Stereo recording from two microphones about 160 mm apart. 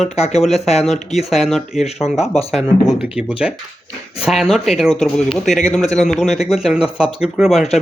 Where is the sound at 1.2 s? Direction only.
Centre (ahead or behind).